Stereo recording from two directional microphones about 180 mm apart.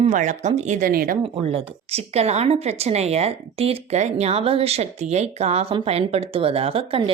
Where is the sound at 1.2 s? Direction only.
30° right (ahead or behind).